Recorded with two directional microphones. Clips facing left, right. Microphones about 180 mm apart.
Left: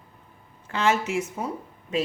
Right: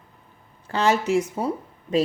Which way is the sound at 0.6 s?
35° right (ahead or behind).